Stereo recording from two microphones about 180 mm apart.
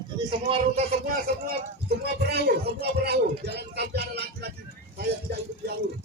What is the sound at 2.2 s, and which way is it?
Speech, 65° right (ahead or behind).